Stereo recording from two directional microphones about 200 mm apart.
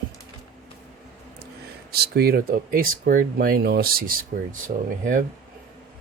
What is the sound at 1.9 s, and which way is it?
Speech, 50° right (ahead or behind).